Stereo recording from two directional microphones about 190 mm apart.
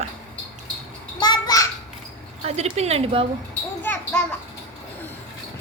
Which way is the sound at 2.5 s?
35° right (ahead or behind).